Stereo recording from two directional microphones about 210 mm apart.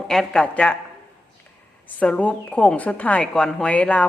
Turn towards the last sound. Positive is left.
turn(degrees=5)  # may be behind; listen again after turning